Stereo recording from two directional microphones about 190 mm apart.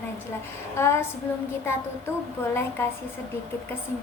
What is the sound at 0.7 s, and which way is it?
Female singing, 15° left (ahead or behind).